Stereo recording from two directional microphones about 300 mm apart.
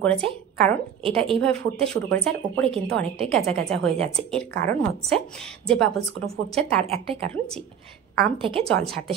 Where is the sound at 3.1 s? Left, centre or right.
Centre.